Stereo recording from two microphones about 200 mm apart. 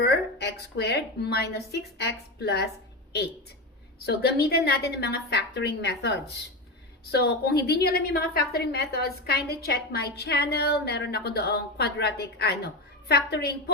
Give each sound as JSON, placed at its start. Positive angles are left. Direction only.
{"t": 0.0, "sound": "a woman's voice", "side_deg": 55}
{"t": 4.0, "sound": "a woman's voice", "side_deg": 55}